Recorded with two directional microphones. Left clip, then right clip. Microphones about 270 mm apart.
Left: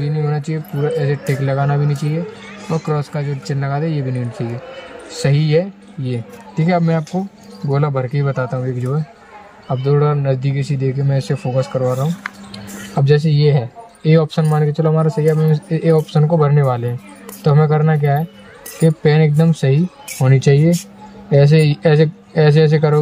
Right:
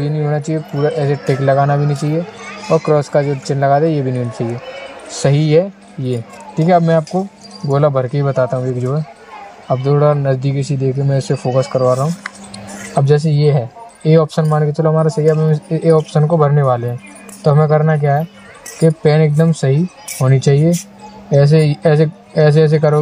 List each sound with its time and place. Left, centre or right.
0.0 s speech: centre